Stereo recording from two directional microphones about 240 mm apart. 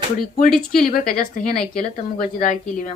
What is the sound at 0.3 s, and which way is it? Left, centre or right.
Speech, left.